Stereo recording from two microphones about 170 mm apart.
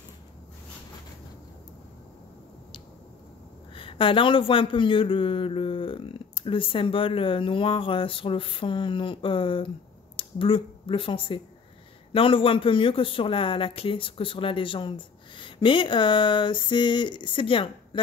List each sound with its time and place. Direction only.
3.7 s speech: 30° left (ahead or behind)